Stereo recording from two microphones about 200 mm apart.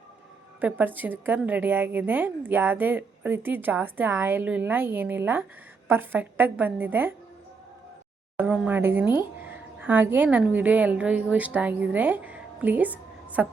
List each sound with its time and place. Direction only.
0.6 s a woman's voice: 10° right (ahead or behind)
8.4 s a woman's voice: 5° right (ahead or behind)